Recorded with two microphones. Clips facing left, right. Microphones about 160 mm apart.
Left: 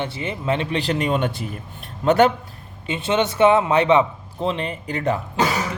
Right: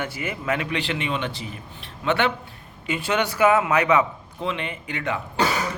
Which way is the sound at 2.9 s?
25° left (ahead or behind).